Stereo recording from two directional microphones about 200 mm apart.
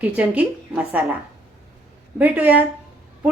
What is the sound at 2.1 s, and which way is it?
Speech, 10° right (ahead or behind).